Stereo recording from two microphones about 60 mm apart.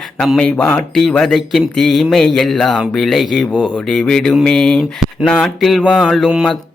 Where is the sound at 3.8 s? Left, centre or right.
Centre.